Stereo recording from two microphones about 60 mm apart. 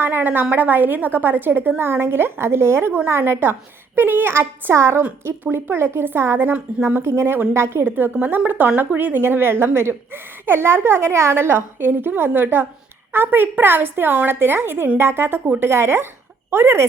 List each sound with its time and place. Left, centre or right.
0.0 s a woman's voice: right
9.1 s a woman's voice: right